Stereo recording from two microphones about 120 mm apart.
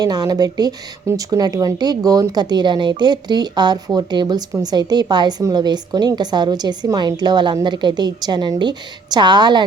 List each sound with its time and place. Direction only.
0.0 s a woman's voice: 30° right (ahead or behind)